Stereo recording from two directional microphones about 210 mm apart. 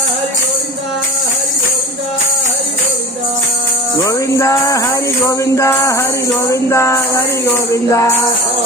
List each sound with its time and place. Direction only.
4.0 s music: 15° left (ahead or behind)